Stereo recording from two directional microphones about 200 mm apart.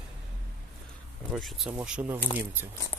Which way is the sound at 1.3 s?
Centre (ahead or behind).